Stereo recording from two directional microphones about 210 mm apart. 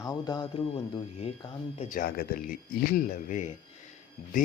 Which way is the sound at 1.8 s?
40° left (ahead or behind).